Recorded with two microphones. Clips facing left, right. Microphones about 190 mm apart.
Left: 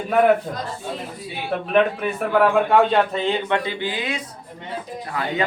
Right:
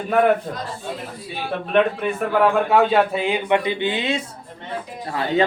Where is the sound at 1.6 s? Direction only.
5° left (ahead or behind).